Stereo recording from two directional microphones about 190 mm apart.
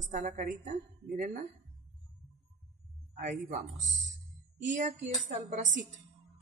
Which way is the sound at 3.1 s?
40° right (ahead or behind).